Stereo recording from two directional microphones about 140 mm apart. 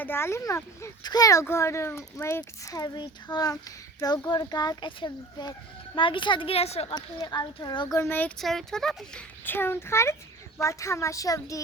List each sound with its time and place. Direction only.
0.0 s speech: 15° left (ahead or behind); by 6.9 s 45° left (ahead or behind)
6.9 s speech: 30° left (ahead or behind)
7.9 s a child's voice: 15° left (ahead or behind)
8.4 s speech: centre (ahead or behind)
9.4 s a child's voice: 15° left (ahead or behind)